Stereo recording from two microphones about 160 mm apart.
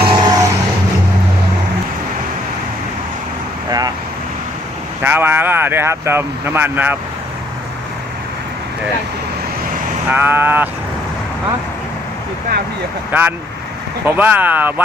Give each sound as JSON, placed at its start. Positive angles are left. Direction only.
{"t": 0.0, "sound": "vehicle", "side_deg": -30}
{"t": 3.7, "sound": "vehicle", "side_deg": -25}
{"t": 5.0, "sound": "speech", "side_deg": -15}
{"t": 10.1, "sound": "speech", "side_deg": -10}
{"t": 13.1, "sound": "speech", "side_deg": -10}